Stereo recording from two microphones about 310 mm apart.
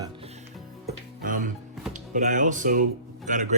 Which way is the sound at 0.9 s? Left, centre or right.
Right.